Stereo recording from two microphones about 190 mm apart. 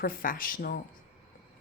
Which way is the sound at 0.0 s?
50° left (ahead or behind).